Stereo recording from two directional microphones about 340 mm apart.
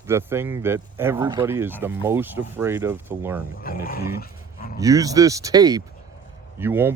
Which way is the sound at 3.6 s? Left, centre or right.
Left.